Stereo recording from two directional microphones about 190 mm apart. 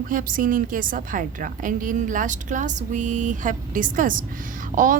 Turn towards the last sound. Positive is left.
turn(degrees=-45)  # may be behind; listen again after turning